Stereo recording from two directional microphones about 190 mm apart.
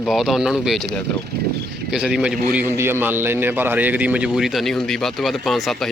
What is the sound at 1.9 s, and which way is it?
A man's voice, 5° right (ahead or behind).